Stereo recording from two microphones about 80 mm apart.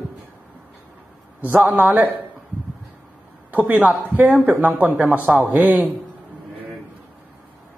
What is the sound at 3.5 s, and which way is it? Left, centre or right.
Speech, centre.